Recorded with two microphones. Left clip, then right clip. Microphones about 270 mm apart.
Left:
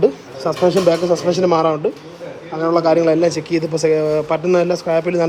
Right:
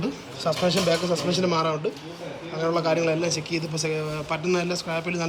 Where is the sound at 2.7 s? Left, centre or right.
Centre.